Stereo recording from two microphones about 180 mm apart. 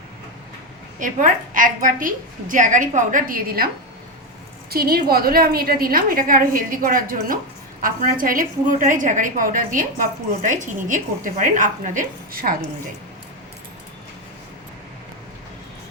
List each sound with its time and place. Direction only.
0.9 s a woman's voice: 45° right (ahead or behind)
4.7 s a woman's voice: 60° right (ahead or behind)